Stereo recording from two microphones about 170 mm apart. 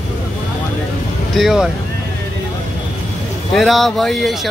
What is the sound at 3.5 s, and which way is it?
Speech, centre (ahead or behind).